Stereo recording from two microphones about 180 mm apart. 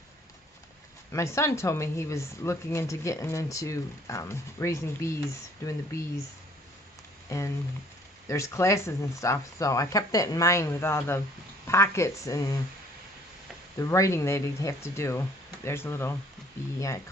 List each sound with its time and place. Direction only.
1.1 s speech: 15° left (ahead or behind)
7.3 s speech: 15° left (ahead or behind)
13.7 s speech: 15° left (ahead or behind)